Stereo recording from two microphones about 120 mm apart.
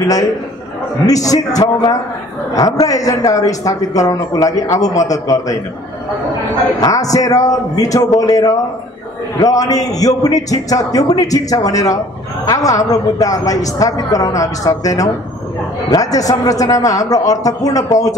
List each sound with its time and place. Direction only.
1.0 s a man's voice: 30° left (ahead or behind)
2.5 s a man's voice: 30° left (ahead or behind)
6.8 s a man's voice: 30° left (ahead or behind)